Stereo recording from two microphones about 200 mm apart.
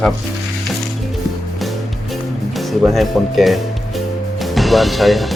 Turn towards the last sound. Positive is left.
turn(degrees=0)  # may be behind; listen again after turning